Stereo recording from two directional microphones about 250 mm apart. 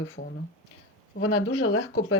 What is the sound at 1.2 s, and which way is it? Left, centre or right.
Speech, left.